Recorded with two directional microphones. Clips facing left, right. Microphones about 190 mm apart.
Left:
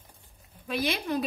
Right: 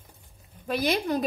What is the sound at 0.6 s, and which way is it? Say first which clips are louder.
Speech: right 4 dB; 45° right (ahead or behind).